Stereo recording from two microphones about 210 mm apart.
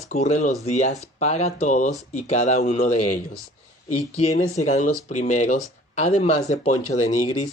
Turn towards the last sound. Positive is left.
turn(degrees=35)  # may be behind; listen again after turning